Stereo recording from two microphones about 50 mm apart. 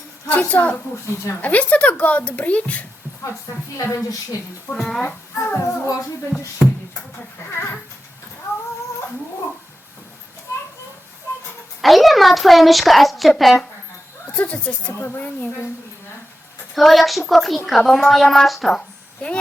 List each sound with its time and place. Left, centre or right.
0.3 s a woman's voice: left
4.8 s a child's voice: centre
5.0 s a child's voice: left
11.8 s a child's voice: centre
14.3 s speech: left
14.9 s a woman's voice: left
16.7 s a child's voice: centre
19.2 s speech: left